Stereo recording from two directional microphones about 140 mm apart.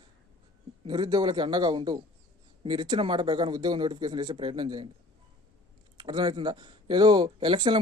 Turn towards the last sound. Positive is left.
turn(degrees=-30)  # may be behind; listen again after turning